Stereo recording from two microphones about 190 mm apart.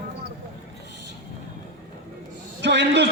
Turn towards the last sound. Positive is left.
turn(degrees=-65)  # may be behind; listen again after turning